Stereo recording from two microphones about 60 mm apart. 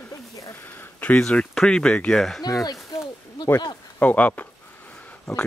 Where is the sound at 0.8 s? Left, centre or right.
Left.